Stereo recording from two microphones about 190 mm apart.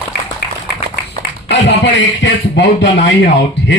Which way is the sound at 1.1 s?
65° left (ahead or behind).